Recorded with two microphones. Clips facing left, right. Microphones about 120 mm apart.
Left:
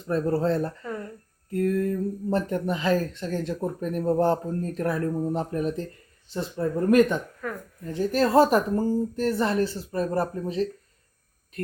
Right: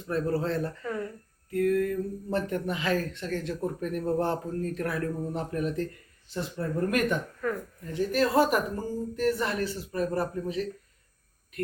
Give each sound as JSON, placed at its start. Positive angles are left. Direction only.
{"t": 0.1, "sound": "speech", "side_deg": 40}
{"t": 7.4, "sound": "speech", "side_deg": 5}
{"t": 7.9, "sound": "speech", "side_deg": 35}